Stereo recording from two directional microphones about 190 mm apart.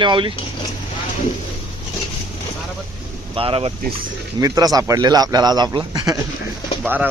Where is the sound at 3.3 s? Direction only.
30° right (ahead or behind).